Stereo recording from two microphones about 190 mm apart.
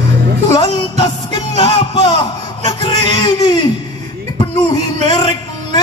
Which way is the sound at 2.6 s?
25° left (ahead or behind).